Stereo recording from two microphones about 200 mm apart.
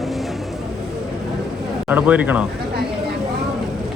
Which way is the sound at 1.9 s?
5° right (ahead or behind).